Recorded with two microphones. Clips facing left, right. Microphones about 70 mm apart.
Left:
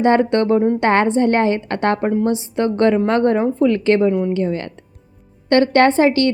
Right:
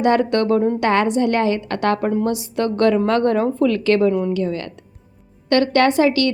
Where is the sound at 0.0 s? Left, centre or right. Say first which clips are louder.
Left 2 dB; left.